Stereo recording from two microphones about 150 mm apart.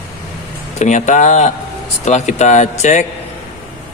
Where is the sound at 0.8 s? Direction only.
50° left (ahead or behind).